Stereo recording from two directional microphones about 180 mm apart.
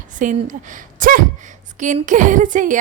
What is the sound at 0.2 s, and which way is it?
A woman's voice, 45° right (ahead or behind).